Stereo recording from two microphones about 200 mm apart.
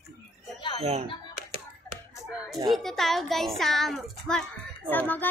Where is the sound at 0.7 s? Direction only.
30° right (ahead or behind).